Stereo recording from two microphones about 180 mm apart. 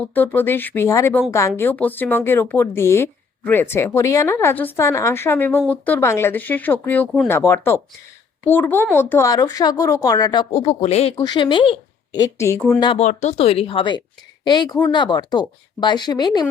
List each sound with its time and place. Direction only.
0.1 s a woman's voice: 10° left (ahead or behind)
10.5 s speech: 35° left (ahead or behind)
11.2 s speech: 25° left (ahead or behind)
13.0 s speech: 40° left (ahead or behind); by 16.5 s 25° left (ahead or behind)